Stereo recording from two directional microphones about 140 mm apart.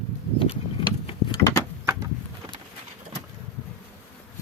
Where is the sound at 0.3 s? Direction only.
40° left (ahead or behind).